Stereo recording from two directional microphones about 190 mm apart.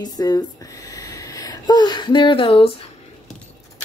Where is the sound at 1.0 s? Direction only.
20° left (ahead or behind).